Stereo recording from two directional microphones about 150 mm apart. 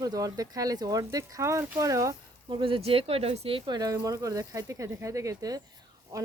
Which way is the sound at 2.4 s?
35° right (ahead or behind).